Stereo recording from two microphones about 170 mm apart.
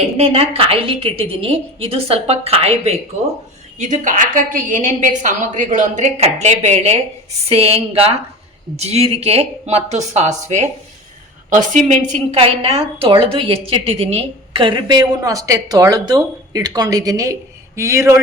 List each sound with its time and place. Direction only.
0.2 s a woman's voice: 35° right (ahead or behind); by 18.2 s 15° right (ahead or behind)